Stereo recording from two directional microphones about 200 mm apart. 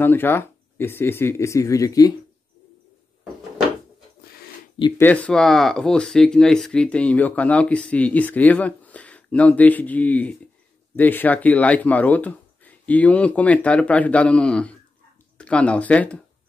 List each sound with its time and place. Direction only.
0.0 s speech: 10° left (ahead or behind)
4.2 s a sound: 50° left (ahead or behind)
4.7 s speech: 20° left (ahead or behind)
5.0 s speech: 5° left (ahead or behind)